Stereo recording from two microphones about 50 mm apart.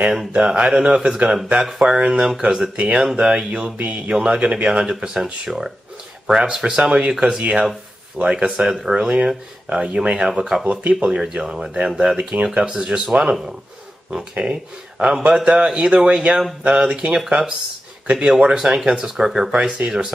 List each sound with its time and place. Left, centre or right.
0.3 s speech: right
8.5 s speech: centre
10.7 s speech: right
12.2 s speech: right
12.4 s speech: centre
18.4 s speech: right
19.5 s speech: right